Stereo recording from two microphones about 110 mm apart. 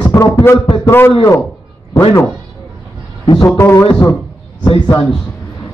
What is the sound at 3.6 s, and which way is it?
A man's voice, 30° left (ahead or behind).